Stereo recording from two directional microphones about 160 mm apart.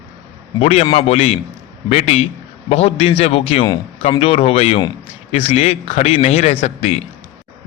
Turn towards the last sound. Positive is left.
turn(degrees=40)  # may be behind; listen again after turning